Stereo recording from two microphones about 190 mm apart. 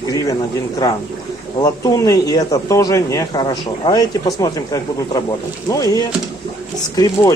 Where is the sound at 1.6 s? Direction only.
20° left (ahead or behind).